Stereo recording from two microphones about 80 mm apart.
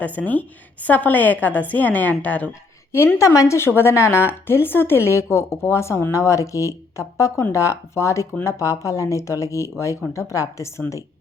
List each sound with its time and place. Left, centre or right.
0.0 s a woman's voice: centre
3.2 s a woman's voice: left